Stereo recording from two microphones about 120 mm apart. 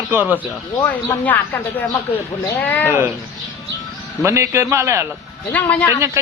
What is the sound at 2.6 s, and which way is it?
Speech, 15° left (ahead or behind).